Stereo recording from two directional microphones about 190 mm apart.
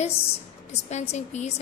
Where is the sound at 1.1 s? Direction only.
35° left (ahead or behind).